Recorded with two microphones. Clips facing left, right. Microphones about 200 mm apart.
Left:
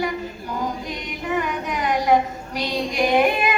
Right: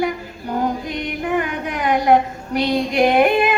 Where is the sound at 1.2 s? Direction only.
55° right (ahead or behind).